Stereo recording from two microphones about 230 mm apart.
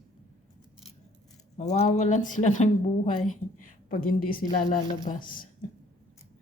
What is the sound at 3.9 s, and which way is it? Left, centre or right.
A woman's voice, left.